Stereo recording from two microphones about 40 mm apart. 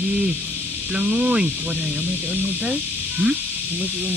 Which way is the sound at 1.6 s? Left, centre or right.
Right.